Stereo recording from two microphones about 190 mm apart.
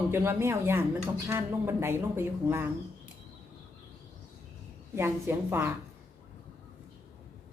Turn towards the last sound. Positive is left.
turn(degrees=-10)  # may be behind; listen again after turning